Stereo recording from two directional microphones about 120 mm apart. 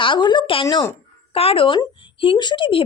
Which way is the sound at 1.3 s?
50° left (ahead or behind).